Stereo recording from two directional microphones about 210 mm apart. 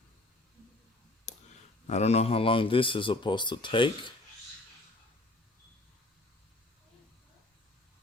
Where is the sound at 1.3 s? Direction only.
35° left (ahead or behind).